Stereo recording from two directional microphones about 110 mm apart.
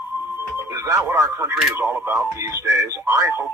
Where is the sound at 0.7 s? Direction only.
25° right (ahead or behind).